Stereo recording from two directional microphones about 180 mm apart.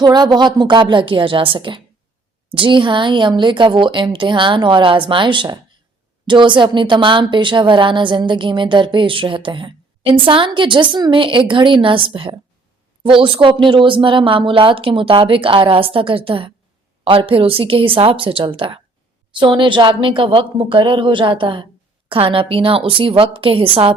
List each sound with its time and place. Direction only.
0.0 s speech: 25° right (ahead or behind)